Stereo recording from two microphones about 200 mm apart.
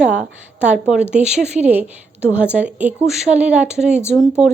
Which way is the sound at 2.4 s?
5° right (ahead or behind).